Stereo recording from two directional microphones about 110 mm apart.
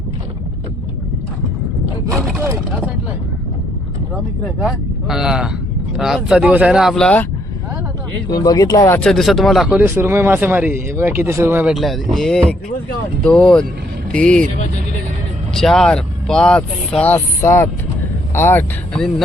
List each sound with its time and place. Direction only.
4.6 s speech: 5° right (ahead or behind)
8.3 s speech: 35° left (ahead or behind)
9.0 s speech: 5° left (ahead or behind)
9.8 s speech: 25° right (ahead or behind)
11.6 s speech: centre (ahead or behind)
15.5 s speech: 5° left (ahead or behind)
17.2 s speech: 25° left (ahead or behind)